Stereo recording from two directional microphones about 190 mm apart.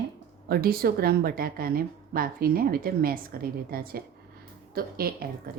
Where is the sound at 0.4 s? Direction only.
55° right (ahead or behind).